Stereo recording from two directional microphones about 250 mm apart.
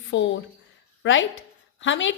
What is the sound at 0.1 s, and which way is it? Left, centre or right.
A woman's voice, left.